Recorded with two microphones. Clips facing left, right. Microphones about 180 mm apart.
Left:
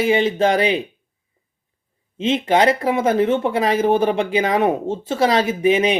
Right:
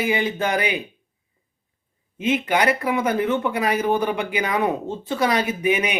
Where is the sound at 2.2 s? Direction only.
25° left (ahead or behind).